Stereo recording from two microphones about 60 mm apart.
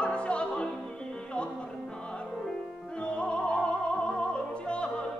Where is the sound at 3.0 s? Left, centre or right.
Centre.